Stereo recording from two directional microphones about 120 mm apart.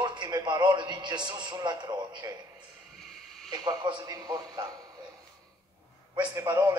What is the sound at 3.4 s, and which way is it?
Speech, 35° right (ahead or behind).